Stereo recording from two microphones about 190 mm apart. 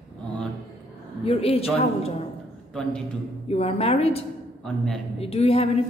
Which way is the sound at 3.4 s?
30° left (ahead or behind).